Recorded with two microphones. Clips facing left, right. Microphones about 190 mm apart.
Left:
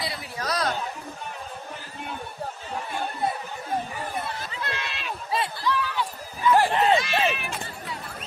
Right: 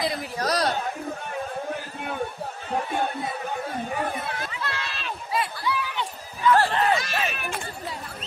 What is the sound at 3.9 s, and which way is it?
Chatter, 60° right (ahead or behind).